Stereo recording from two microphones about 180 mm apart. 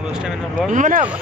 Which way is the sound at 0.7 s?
45° right (ahead or behind).